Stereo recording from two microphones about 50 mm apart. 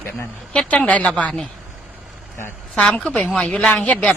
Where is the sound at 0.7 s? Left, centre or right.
Left.